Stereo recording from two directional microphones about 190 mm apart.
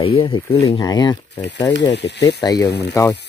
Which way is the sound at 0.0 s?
30° left (ahead or behind).